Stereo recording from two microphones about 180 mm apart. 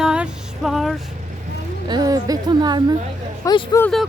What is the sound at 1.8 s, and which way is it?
Speech, 20° right (ahead or behind).